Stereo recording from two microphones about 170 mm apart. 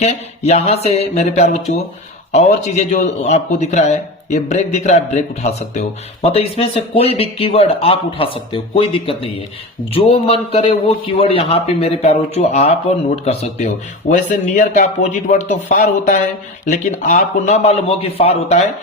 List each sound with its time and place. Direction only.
0.0 s a man's voice: 40° left (ahead or behind)